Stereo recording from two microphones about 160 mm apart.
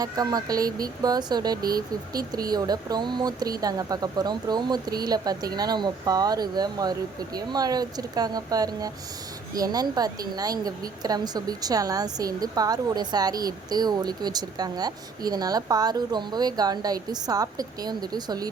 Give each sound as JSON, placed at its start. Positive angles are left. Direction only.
{"t": 0.0, "sound": "a woman's voice", "side_deg": -25}